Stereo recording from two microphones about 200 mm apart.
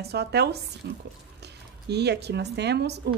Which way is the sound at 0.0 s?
55° right (ahead or behind).